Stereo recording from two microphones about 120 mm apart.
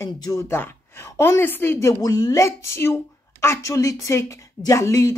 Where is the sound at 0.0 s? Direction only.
30° left (ahead or behind).